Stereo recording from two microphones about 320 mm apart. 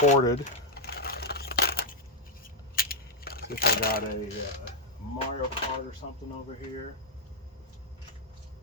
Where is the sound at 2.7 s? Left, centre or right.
Left.